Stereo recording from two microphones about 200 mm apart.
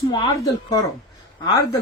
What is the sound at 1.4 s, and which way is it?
Speech, 20° left (ahead or behind).